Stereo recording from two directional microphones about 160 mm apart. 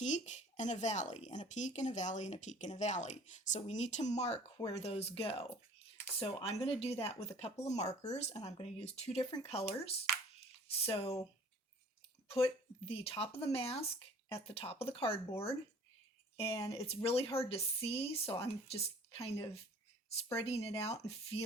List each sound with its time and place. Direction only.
0.0 s speech: 45° left (ahead or behind)
8.4 s speech: 30° left (ahead or behind)
12.3 s speech: 35° left (ahead or behind)
15.3 s speech: 15° left (ahead or behind)
16.4 s speech: 35° left (ahead or behind)